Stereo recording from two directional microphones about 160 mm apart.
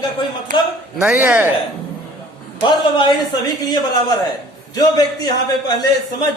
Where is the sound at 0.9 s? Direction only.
5° right (ahead or behind).